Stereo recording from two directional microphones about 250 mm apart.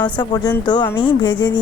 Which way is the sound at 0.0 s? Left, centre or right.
Centre.